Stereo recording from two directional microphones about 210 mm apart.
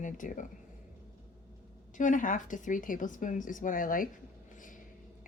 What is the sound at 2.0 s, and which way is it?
Speech, 40° left (ahead or behind).